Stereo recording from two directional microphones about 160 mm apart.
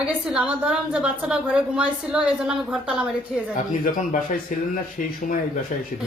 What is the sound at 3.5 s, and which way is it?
Speech, 55° left (ahead or behind).